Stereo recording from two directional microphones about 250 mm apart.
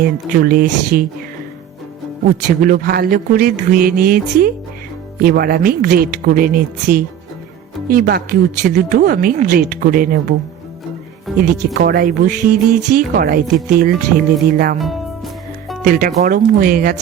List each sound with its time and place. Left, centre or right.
0.0 s speech: right
2.6 s speech: right
11.3 s speech: right
15.8 s speech: right